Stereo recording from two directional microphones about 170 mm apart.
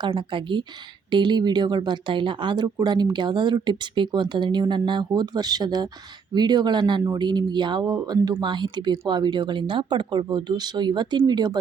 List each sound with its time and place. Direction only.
0.0 s speech: 30° right (ahead or behind)